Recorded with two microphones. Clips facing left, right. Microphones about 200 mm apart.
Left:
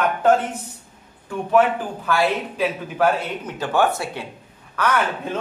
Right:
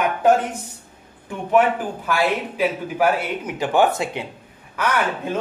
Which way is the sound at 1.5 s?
15° right (ahead or behind).